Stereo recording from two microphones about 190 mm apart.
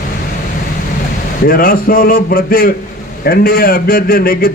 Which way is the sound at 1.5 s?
50° left (ahead or behind).